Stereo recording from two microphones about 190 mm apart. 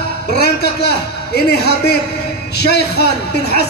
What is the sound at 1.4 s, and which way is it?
A man's voice, 60° left (ahead or behind).